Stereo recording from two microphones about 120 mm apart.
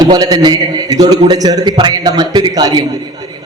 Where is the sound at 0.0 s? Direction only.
35° right (ahead or behind).